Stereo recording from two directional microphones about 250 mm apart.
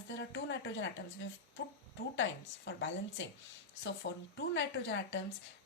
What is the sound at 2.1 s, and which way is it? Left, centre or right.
A woman's voice, left.